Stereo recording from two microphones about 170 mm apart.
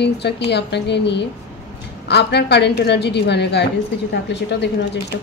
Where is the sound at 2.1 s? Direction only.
75° left (ahead or behind).